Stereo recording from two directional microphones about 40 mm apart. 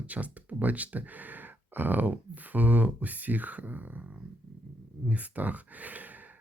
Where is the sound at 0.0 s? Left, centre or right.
Right.